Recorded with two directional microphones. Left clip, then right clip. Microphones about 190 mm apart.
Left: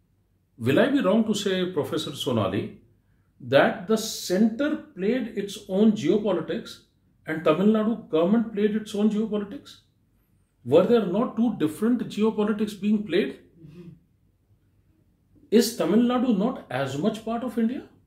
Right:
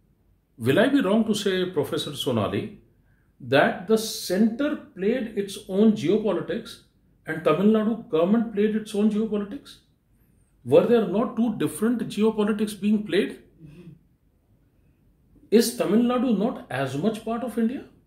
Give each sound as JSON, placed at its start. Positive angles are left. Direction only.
{"t": 0.6, "sound": "speech", "side_deg": -15}
{"t": 15.5, "sound": "speech", "side_deg": -10}